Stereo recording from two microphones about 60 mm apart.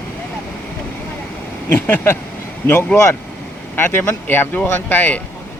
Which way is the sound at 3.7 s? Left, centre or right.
Left.